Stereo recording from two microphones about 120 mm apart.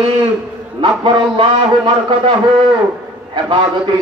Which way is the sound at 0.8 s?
45° right (ahead or behind).